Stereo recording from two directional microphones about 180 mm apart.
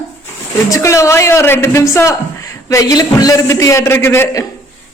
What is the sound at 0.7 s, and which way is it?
A man's voice, 15° left (ahead or behind).